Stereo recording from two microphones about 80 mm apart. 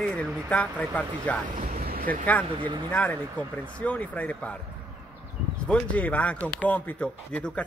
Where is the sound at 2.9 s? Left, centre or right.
Centre.